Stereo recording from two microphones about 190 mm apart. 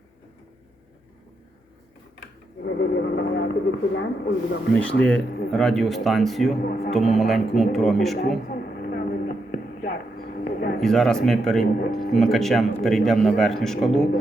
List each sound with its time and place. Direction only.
2.6 s speech: 70° left (ahead or behind)
4.7 s speech: 5° left (ahead or behind)
6.6 s speech: 50° left (ahead or behind)
6.9 s speech: centre (ahead or behind)
8.4 s a sound: 50° left (ahead or behind)
10.8 s a man's voice: centre (ahead or behind)